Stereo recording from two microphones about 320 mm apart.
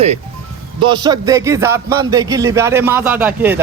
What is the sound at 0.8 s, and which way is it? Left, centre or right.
A man's voice, centre.